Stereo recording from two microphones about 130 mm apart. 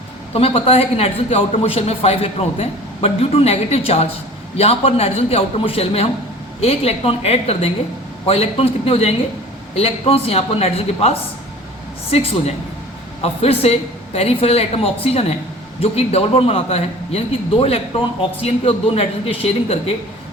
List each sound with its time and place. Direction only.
0.3 s a man's voice: 50° left (ahead or behind)